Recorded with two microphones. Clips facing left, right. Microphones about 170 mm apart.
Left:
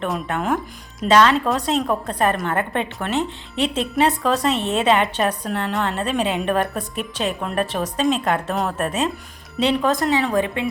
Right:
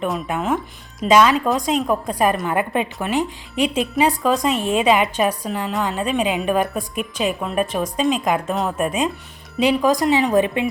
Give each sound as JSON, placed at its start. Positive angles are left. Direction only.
{"t": 0.0, "sound": "a woman's voice", "side_deg": -5}